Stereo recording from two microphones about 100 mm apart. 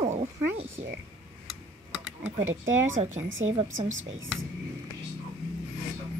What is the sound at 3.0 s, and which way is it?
Speech, 60° right (ahead or behind).